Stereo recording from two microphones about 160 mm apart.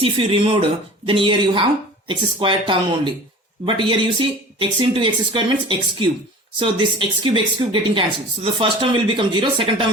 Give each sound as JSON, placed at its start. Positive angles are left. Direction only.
{"t": 0.0, "sound": "a woman's voice", "side_deg": -35}